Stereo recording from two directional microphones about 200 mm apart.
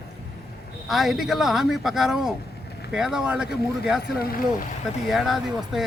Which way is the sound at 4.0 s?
45° left (ahead or behind).